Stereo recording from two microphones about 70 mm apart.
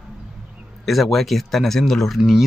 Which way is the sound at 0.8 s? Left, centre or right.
Centre.